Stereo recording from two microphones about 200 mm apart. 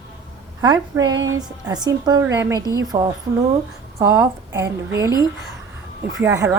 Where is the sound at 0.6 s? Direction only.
20° right (ahead or behind).